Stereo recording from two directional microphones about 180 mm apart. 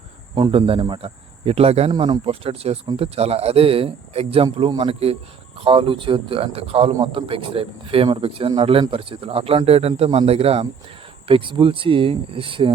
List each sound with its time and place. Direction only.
0.3 s speech: 30° right (ahead or behind)